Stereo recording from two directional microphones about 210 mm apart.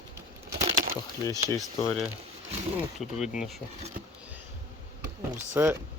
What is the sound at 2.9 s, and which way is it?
Speech, centre (ahead or behind).